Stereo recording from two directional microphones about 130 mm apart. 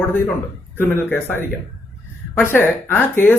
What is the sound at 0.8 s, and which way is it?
Speech, 15° left (ahead or behind).